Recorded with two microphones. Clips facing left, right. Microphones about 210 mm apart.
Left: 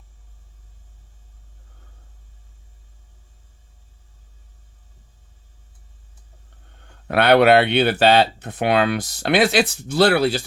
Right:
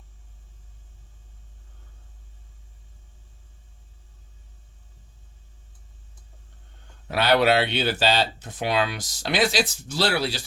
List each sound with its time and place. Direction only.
7.1 s speech: 60° left (ahead or behind)